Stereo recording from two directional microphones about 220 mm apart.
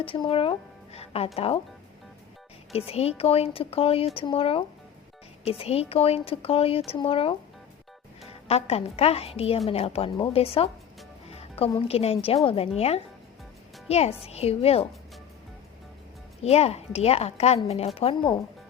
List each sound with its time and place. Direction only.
0.0 s a woman's voice: 25° left (ahead or behind)
0.9 s music: 25° left (ahead or behind)
2.7 s a woman's voice: 25° left (ahead or behind)
11.3 s music: 25° left (ahead or behind)
11.9 s a woman's voice: 25° left (ahead or behind)
16.4 s a woman's voice: 30° left (ahead or behind)